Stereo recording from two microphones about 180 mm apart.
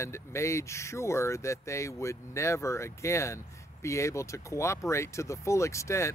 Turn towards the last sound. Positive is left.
turn(degrees=15)  # may be behind; listen again after turning